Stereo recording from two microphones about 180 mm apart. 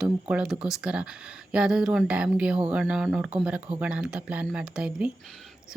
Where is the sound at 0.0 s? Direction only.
5° right (ahead or behind).